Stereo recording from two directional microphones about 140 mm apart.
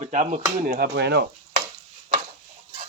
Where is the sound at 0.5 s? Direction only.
80° right.